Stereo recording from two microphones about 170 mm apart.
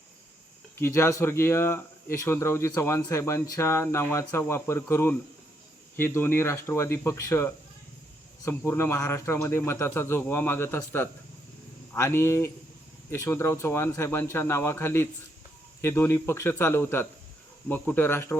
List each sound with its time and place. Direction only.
0.8 s speech: 15° left (ahead or behind)